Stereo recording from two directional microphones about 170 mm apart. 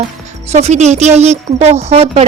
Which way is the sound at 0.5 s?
40° right (ahead or behind).